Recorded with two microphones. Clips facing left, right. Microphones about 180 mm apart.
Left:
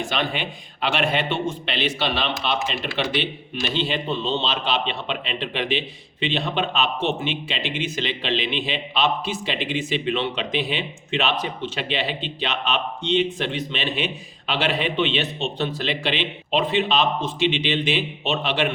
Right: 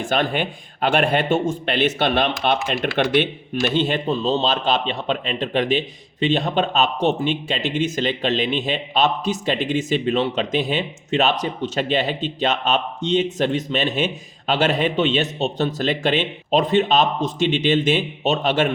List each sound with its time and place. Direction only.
0.1 s a man's voice: 50° right (ahead or behind)